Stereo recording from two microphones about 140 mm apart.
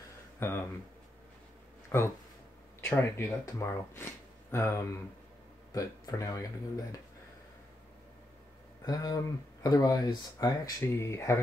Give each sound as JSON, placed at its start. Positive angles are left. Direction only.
{"t": 0.4, "sound": "speech", "side_deg": 15}
{"t": 1.9, "sound": "speech", "side_deg": 20}
{"t": 8.8, "sound": "speech", "side_deg": 30}